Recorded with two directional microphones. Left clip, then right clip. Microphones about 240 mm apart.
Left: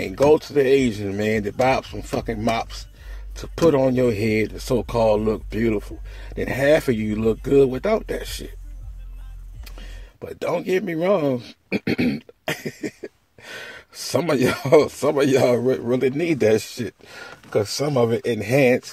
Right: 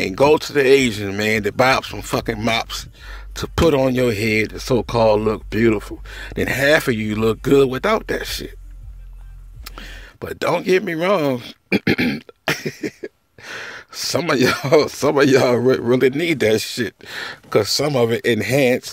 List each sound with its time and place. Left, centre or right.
0.0 s speech: right
9.7 s speech: right